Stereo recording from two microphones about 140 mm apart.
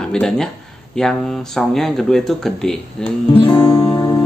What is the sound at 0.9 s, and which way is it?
Speech, 5° left (ahead or behind).